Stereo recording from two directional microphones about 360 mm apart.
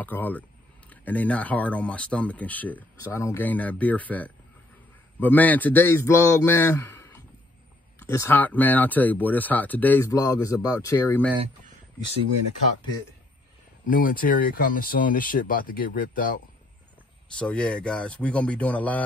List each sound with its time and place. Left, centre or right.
0.0 s speech: centre
13.8 s speech: left
17.4 s speech: centre